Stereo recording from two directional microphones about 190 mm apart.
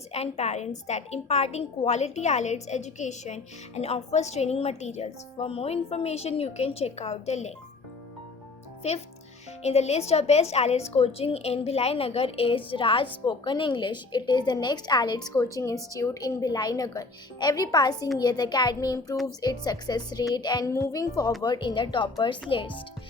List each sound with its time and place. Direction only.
0.1 s a woman's voice: 35° left (ahead or behind)
8.8 s a woman's voice: 35° left (ahead or behind)